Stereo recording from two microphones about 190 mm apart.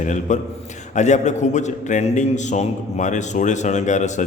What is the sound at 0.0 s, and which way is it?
A man's voice, 40° left (ahead or behind).